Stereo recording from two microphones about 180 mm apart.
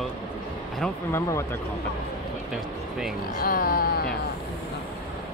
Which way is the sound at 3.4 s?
55° left (ahead or behind).